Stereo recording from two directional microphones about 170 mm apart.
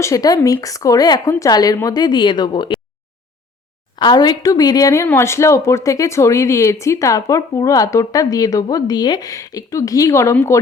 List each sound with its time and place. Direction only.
0.0 s a woman's voice: 20° left (ahead or behind)
3.9 s a woman's voice: 25° left (ahead or behind)